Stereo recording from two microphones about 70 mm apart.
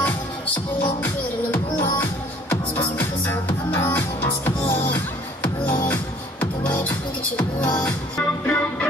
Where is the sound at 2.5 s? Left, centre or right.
Left.